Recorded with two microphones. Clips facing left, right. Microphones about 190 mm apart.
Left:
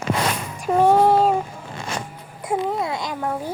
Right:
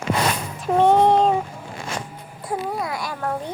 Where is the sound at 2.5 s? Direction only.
25° left (ahead or behind).